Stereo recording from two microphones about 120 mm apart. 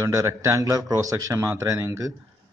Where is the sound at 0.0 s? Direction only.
30° right (ahead or behind).